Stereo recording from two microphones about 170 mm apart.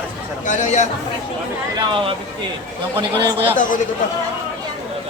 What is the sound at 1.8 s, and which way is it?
A man's voice, 30° right (ahead or behind).